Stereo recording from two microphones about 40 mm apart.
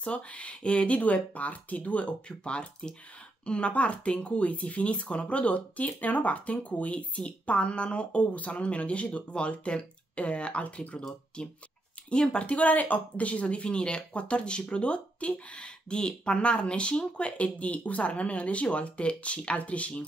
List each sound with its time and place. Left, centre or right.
0.0 s speech: left
2.2 s speech: left
11.0 s speech: centre